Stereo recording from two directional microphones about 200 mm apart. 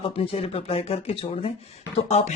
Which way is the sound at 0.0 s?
30° left (ahead or behind).